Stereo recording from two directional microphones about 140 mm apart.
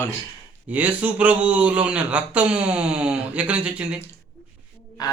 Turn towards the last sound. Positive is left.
turn(degrees=25)  # may be behind; listen again after turning